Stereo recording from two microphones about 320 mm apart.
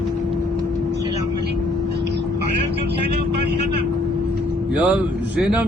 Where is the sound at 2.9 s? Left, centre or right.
Right.